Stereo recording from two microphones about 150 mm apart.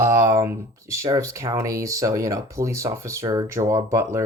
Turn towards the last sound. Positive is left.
turn(degrees=-20)  # may be behind; listen again after turning